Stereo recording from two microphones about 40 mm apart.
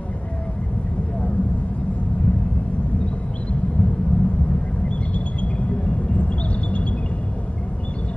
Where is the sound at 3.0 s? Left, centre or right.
Left.